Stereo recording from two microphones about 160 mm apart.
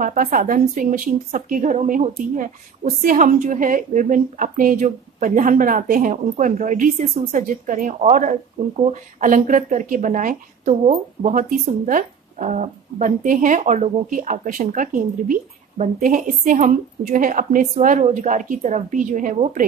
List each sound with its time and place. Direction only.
0.0 s a woman's voice: 55° right (ahead or behind)